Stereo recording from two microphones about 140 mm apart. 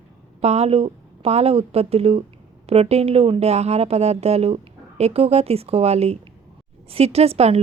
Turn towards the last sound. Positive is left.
turn(degrees=-45)  # may be behind; listen again after turning